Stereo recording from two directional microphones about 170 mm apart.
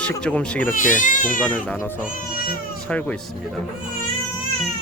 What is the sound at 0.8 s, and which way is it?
Speech, 50° left (ahead or behind).